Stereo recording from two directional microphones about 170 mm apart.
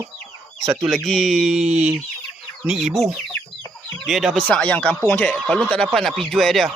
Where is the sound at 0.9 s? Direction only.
Centre (ahead or behind).